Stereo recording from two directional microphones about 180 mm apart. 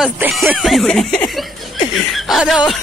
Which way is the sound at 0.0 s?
Centre (ahead or behind).